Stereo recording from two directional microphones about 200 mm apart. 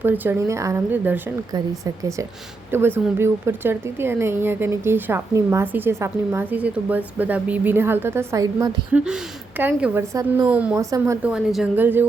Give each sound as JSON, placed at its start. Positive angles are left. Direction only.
{"t": 0.0, "sound": "speech", "side_deg": -10}